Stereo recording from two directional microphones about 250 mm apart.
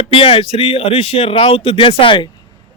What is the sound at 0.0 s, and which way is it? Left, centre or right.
Speech, left.